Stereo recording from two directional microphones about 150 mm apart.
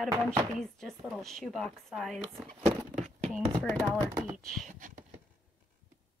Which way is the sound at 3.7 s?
Centre (ahead or behind).